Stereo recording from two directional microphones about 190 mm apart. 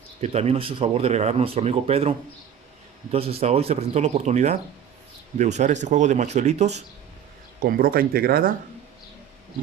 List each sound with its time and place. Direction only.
0.2 s speech: 35° right (ahead or behind)
7.6 s speech: 50° right (ahead or behind)